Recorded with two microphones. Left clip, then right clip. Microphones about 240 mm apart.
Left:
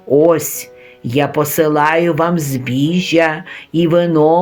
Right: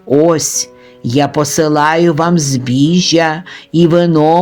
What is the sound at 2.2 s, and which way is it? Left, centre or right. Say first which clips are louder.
Speech: right 2 dB; right.